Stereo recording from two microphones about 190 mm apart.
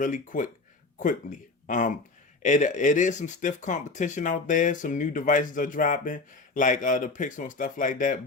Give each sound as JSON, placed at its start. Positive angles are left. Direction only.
{"t": 0.0, "sound": "speech", "side_deg": 45}
{"t": 1.6, "sound": "speech", "side_deg": 45}